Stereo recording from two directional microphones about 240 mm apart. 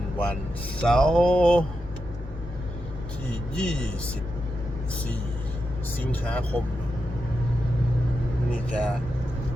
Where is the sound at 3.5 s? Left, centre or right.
Centre.